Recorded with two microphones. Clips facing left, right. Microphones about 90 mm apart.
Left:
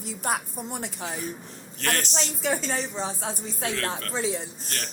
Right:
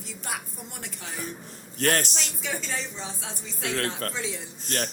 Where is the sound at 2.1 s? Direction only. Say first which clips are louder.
Left 6 dB; 40° left (ahead or behind).